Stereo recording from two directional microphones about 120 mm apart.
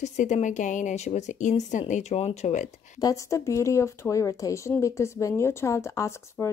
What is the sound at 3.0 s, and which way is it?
A woman's voice, 30° left (ahead or behind).